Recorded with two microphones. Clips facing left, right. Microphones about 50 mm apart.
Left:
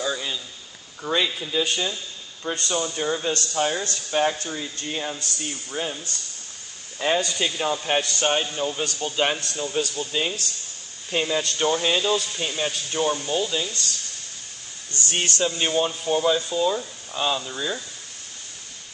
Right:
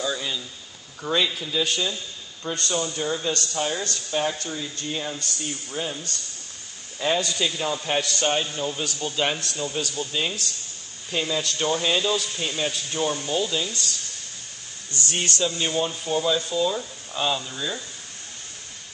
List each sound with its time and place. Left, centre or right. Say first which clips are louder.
0.0 s a sound: even; centre
1.0 s speech: even; centre
11.1 s speech: left 2 dB; centre
15.0 s speech: left 1 dB; left; by 17.8 s centre